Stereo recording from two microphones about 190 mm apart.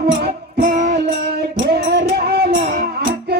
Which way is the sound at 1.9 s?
60° right (ahead or behind).